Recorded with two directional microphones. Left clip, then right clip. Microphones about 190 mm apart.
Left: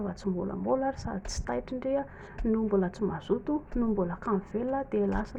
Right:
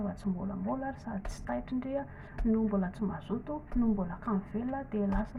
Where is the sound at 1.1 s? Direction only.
35° left (ahead or behind).